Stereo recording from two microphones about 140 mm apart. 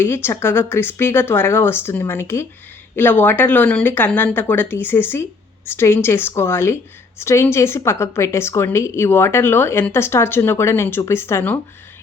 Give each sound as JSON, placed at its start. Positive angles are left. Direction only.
{"t": 0.0, "sound": "a woman's voice", "side_deg": 15}